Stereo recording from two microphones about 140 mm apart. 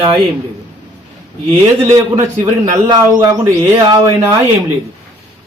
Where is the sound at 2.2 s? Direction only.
25° right (ahead or behind).